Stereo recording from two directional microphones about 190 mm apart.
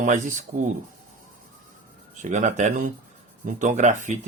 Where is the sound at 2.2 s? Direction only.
40° right (ahead or behind).